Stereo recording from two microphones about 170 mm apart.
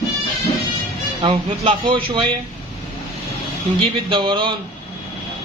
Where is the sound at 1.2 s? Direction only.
30° right (ahead or behind).